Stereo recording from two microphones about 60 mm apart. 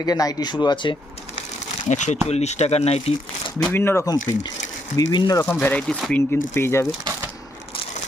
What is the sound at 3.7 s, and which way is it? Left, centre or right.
Speech, left.